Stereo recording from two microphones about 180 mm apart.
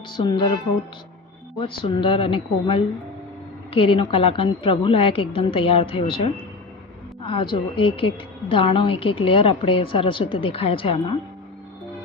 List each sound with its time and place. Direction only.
0.1 s a woman's voice: 25° left (ahead or behind)
1.5 s a woman's voice: 30° left (ahead or behind)